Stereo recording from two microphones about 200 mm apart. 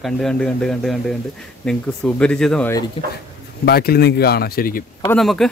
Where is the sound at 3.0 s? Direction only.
30° left (ahead or behind).